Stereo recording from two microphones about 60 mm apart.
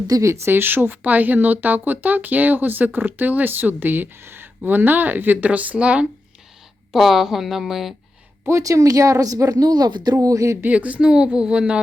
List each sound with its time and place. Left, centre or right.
0.3 s speech: right
6.9 s speech: centre
8.4 s a woman's voice: right
10.6 s a woman's voice: right